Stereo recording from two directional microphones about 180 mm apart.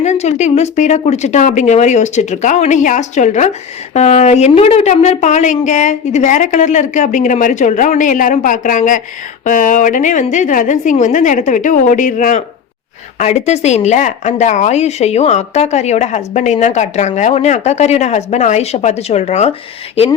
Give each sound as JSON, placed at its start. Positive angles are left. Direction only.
{"t": 0.0, "sound": "a woman's voice", "side_deg": 40}